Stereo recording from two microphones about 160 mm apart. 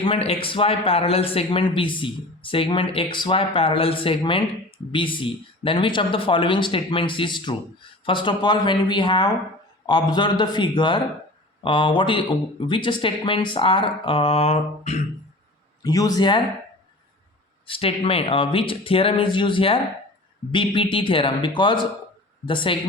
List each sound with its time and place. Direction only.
0.0 s a man's voice: 35° left (ahead or behind)
15.8 s a man's voice: 25° left (ahead or behind)
17.7 s speech: 35° left (ahead or behind)